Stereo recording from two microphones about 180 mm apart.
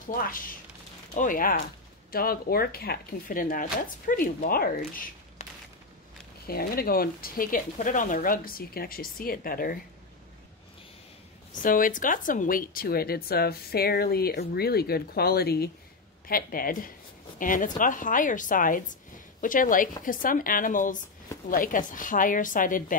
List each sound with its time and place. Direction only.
0.1 s speech: 50° left (ahead or behind)
11.5 s speech: 50° left (ahead or behind)